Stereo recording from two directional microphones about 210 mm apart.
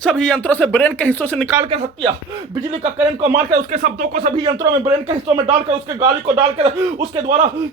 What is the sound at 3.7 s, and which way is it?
Speech, 40° right (ahead or behind).